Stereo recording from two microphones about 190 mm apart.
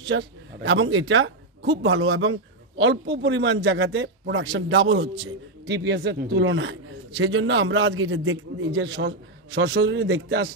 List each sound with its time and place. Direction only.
0.1 s a man's voice: 75° right (ahead or behind); by 2.3 s 90° right
2.8 s a man's voice: 70° right (ahead or behind)
5.7 s a man's voice: 65° right (ahead or behind)